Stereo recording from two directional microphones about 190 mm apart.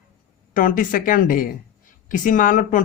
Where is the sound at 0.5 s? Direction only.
45° left (ahead or behind).